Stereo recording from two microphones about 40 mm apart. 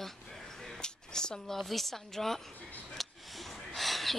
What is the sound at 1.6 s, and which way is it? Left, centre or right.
Speech, centre.